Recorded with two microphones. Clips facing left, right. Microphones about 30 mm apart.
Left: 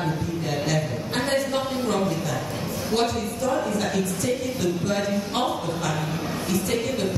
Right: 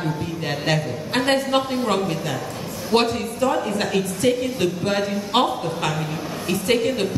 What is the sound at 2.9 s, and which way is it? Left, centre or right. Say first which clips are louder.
A woman's voice: right 5 dB; right.